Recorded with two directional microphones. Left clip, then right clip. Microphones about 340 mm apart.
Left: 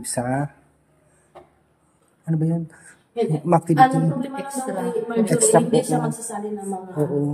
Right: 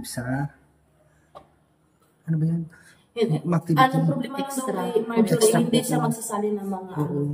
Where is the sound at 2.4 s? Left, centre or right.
Centre.